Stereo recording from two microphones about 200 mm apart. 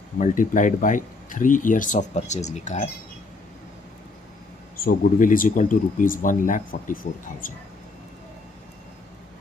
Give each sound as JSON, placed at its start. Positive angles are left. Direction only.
{"t": 0.2, "sound": "speech", "side_deg": 40}
{"t": 4.7, "sound": "speech", "side_deg": 45}